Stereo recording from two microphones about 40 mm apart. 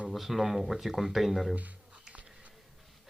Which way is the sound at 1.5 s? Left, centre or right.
Right.